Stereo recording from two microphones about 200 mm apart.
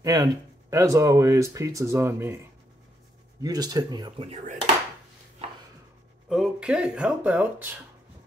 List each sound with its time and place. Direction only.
0.0 s speech: 15° right (ahead or behind)
3.4 s speech: 20° right (ahead or behind)
4.3 s speech: 35° right (ahead or behind)
6.2 s speech: centre (ahead or behind)